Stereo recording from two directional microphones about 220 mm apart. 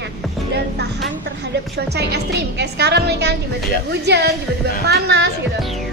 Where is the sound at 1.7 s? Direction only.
50° right (ahead or behind).